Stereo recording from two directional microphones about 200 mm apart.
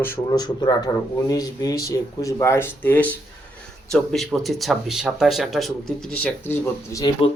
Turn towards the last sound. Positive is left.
turn(degrees=30)  # may be behind; listen again after turning